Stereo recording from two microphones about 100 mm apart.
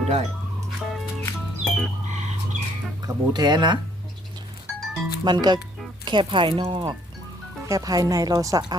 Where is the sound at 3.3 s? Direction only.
45° right (ahead or behind).